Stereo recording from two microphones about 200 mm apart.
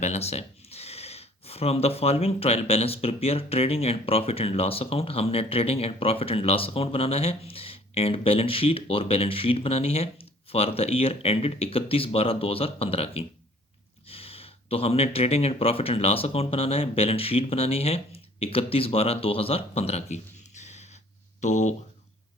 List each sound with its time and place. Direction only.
0.0 s speech: 30° left (ahead or behind)